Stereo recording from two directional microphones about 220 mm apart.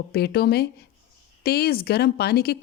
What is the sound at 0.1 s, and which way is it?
Speech, 45° left (ahead or behind).